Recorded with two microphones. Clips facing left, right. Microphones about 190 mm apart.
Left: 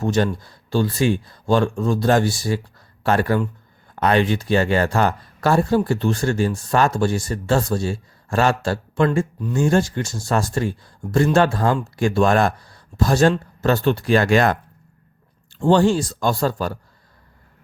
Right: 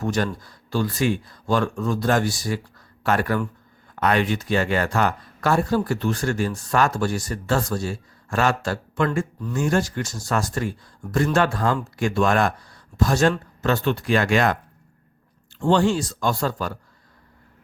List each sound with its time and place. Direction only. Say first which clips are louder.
0.0 s speech: left 4 dB; 25° left (ahead or behind)
15.7 s speech: left 3 dB; 35° left (ahead or behind)